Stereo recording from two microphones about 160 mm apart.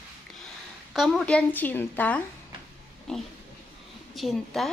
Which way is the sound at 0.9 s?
Centre (ahead or behind).